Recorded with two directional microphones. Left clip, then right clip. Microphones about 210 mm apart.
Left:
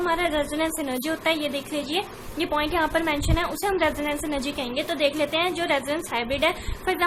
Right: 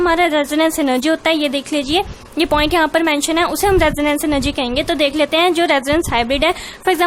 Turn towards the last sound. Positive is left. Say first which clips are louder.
# right 9 dB
turn(degrees=-50)  # may be behind; listen again after turning